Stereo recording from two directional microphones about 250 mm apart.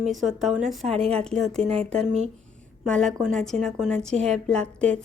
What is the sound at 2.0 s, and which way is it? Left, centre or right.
Speech, right.